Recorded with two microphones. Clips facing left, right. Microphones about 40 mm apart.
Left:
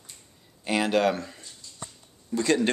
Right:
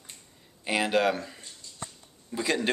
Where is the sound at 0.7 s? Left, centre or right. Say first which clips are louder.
Left 2 dB; centre.